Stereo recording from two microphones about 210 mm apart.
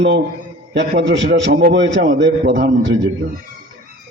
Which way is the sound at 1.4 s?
50° right (ahead or behind).